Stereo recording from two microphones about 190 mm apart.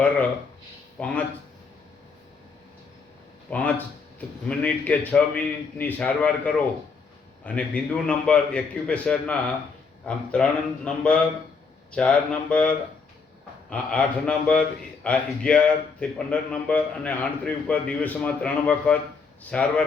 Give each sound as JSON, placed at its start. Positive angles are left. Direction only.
{"t": 0.9, "sound": "speech", "side_deg": 5}
{"t": 3.5, "sound": "a man's voice", "side_deg": 10}